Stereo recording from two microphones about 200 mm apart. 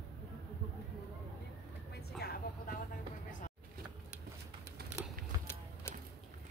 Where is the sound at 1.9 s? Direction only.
50° left (ahead or behind).